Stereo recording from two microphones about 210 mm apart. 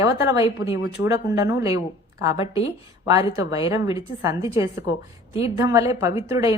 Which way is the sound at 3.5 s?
15° right (ahead or behind).